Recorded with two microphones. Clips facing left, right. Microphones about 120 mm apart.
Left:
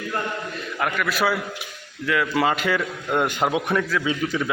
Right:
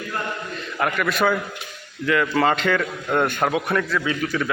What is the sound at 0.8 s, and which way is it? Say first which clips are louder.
A man's voice: right 2 dB; centre (ahead or behind).